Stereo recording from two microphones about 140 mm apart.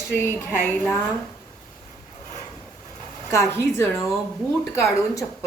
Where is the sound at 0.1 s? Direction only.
15° left (ahead or behind).